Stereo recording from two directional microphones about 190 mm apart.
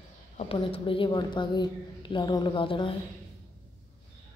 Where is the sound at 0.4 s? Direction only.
30° left (ahead or behind).